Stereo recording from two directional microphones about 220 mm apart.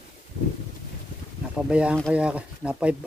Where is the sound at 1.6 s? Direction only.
5° right (ahead or behind).